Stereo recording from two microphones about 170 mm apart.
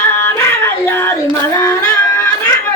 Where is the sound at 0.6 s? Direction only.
15° left (ahead or behind).